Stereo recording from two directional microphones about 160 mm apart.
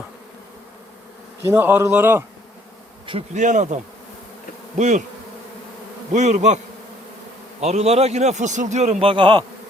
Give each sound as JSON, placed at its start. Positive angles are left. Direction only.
{"t": 1.5, "sound": "a man's voice", "side_deg": -15}
{"t": 3.1, "sound": "a man's voice", "side_deg": -45}
{"t": 4.8, "sound": "a man's voice", "side_deg": -50}
{"t": 6.1, "sound": "a man's voice", "side_deg": -50}
{"t": 7.6, "sound": "a man's voice", "side_deg": -40}